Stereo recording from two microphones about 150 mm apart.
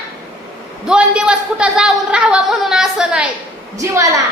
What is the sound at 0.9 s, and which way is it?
A woman's voice, 5° right (ahead or behind).